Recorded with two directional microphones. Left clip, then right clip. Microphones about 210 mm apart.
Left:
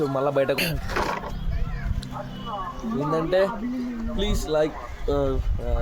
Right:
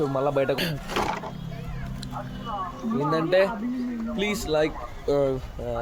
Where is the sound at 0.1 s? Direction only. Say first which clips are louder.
Left 1 dB; 5° left (ahead or behind).